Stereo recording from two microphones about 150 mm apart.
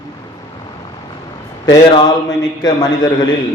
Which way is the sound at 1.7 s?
30° left (ahead or behind).